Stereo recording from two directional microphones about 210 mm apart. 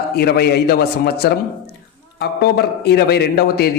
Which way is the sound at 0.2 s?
50° left (ahead or behind).